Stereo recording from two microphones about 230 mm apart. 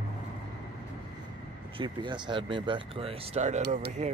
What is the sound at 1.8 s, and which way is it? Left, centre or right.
Speech, centre.